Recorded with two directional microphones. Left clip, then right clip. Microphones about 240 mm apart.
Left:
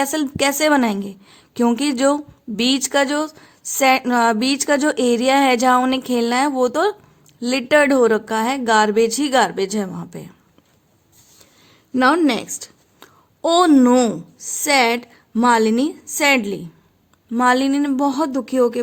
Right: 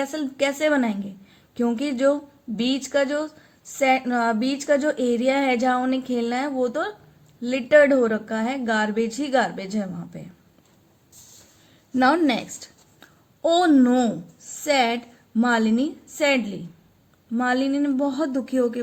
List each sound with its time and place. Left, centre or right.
0.0 s a woman's voice: left
11.9 s a woman's voice: left